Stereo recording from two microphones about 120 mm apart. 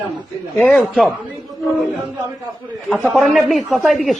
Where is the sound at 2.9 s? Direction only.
Centre (ahead or behind).